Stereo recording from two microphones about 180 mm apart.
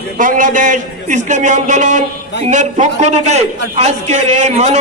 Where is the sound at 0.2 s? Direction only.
45° right (ahead or behind).